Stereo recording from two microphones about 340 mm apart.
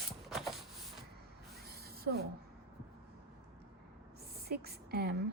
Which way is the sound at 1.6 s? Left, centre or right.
Right.